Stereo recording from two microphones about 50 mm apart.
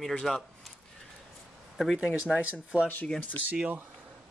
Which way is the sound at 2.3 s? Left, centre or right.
Right.